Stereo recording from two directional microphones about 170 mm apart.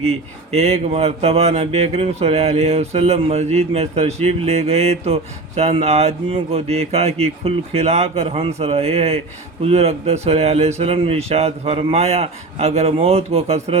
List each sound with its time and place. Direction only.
0.0 s speech: 40° right (ahead or behind)